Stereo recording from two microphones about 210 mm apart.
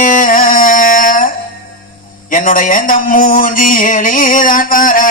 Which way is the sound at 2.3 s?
40° left (ahead or behind).